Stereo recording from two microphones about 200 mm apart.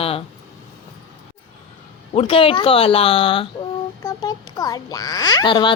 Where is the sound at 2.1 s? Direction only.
30° left (ahead or behind).